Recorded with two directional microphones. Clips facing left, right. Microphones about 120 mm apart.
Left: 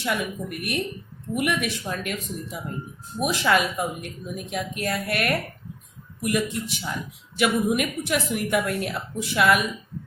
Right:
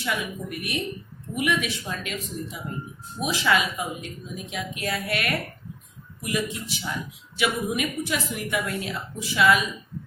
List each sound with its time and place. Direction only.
0.0 s a woman's voice: 55° left (ahead or behind)